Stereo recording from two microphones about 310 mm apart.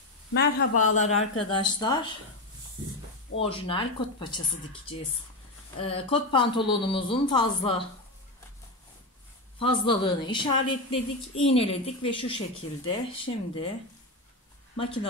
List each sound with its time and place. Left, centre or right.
0.3 s a man's voice: left; by 2.0 s centre
3.3 s a woman's voice: centre
5.8 s a woman's voice: centre
9.6 s a woman's voice: centre